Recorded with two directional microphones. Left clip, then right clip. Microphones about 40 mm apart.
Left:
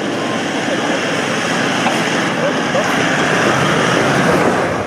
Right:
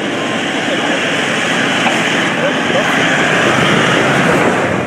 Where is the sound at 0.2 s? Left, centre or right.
Centre.